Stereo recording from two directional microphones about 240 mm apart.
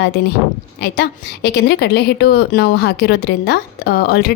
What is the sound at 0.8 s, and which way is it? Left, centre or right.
A woman's voice, left.